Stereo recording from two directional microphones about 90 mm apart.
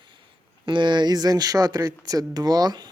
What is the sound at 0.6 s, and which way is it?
Speech, 60° right (ahead or behind).